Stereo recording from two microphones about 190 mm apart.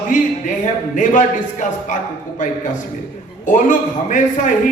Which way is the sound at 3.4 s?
40° left (ahead or behind).